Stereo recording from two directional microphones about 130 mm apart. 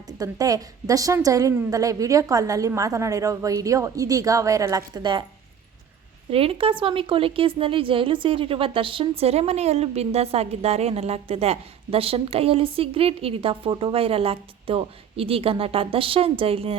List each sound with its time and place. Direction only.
0.2 s a woman's voice: 30° right (ahead or behind)
6.3 s a woman's voice: 45° right (ahead or behind)